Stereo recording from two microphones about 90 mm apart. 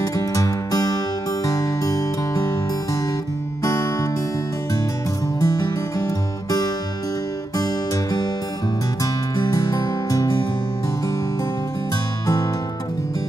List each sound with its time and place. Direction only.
0.0 s music: 40° left (ahead or behind)
5.4 s music: 45° left (ahead or behind)